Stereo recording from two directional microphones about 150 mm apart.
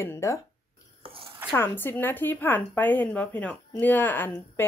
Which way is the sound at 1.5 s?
15° left (ahead or behind).